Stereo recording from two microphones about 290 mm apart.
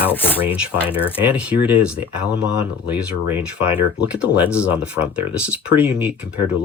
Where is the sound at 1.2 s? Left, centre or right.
Centre.